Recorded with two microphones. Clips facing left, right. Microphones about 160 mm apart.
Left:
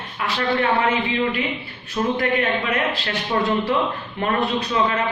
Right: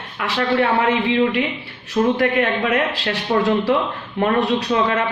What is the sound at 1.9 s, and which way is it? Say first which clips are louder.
Speech: right 4 dB; 70° right (ahead or behind).